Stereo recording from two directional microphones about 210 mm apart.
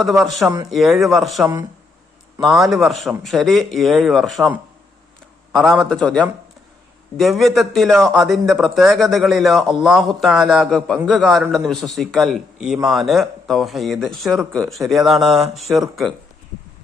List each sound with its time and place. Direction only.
0.0 s a man's voice: centre (ahead or behind)
2.6 s a man's voice: centre (ahead or behind)
5.5 s a man's voice: centre (ahead or behind)
15.3 s a sound: 30° right (ahead or behind)
15.5 s a man's voice: centre (ahead or behind)